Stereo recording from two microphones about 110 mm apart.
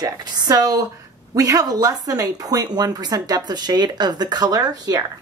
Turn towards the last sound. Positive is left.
turn(degrees=-35)  # may be behind; listen again after turning